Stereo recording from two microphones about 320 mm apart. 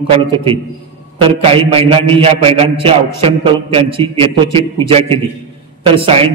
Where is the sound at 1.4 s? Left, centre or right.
Centre.